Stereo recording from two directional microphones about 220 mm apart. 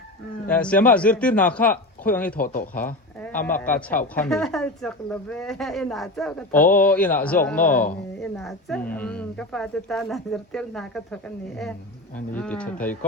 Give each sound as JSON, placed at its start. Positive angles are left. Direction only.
{"t": 0.4, "sound": "a woman's voice", "side_deg": 5}
{"t": 2.4, "sound": "speech", "side_deg": 40}
{"t": 3.2, "sound": "a woman's voice", "side_deg": 5}